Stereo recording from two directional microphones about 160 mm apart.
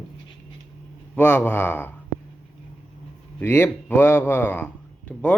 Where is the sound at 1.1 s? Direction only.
10° left (ahead or behind).